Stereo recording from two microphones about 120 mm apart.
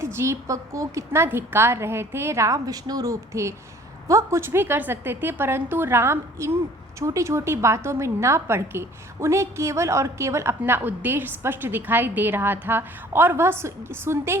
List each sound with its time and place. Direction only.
0.0 s a woman's voice: 20° right (ahead or behind)